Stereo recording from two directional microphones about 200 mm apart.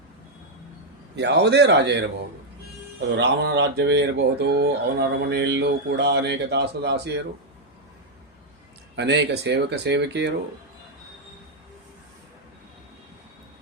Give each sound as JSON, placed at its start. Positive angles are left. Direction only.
{"t": 1.1, "sound": "speech", "side_deg": -60}
{"t": 3.1, "sound": "speech", "side_deg": -60}
{"t": 9.0, "sound": "speech", "side_deg": -60}